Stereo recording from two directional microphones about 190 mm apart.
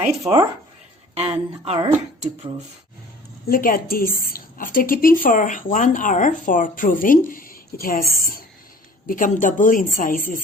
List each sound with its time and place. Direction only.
0.2 s speech: 20° right (ahead or behind)
1.1 s speech: 30° right (ahead or behind)
3.5 s a woman's voice: 50° left (ahead or behind)
9.0 s a woman's voice: 45° left (ahead or behind)